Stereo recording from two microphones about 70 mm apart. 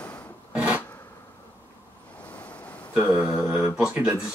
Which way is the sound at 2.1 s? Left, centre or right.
Centre.